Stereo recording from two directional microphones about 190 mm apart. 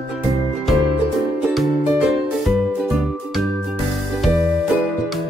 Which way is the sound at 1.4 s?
5° right (ahead or behind).